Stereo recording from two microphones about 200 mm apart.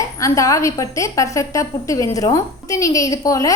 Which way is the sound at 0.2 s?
15° left (ahead or behind).